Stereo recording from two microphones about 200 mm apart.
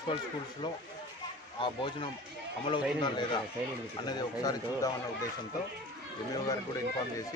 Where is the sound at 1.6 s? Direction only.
25° left (ahead or behind).